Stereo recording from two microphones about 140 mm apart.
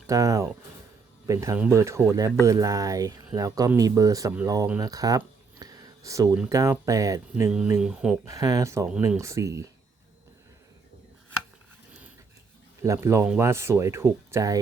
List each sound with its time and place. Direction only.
0.1 s speech: 25° right (ahead or behind)
4.8 s a sound: 25° right (ahead or behind)
6.5 s speech: 25° right (ahead or behind)
7.8 s speech: 5° right (ahead or behind)
8.3 s speech: 25° right (ahead or behind)
12.8 s speech: 20° right (ahead or behind)